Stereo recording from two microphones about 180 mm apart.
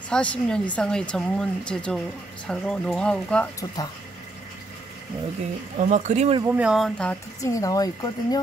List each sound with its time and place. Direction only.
0.1 s speech: 5° left (ahead or behind)
5.9 s speech: 40° right (ahead or behind)
6.4 s speech: 5° right (ahead or behind)
7.4 s speech: 20° left (ahead or behind)